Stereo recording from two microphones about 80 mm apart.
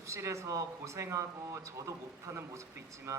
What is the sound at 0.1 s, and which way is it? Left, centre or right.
A man's voice, right.